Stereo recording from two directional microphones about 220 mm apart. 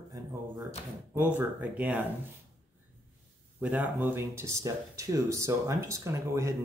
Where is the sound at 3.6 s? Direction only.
5° right (ahead or behind).